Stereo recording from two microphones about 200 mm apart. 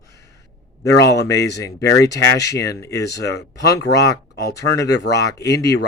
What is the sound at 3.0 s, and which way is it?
Speech, 55° left (ahead or behind).